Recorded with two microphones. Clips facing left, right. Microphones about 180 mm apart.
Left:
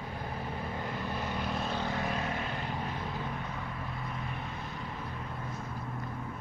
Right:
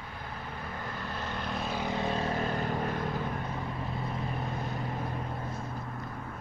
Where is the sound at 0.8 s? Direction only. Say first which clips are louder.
Left 1 dB; 15° left (ahead or behind); by 1.8 s centre (ahead or behind).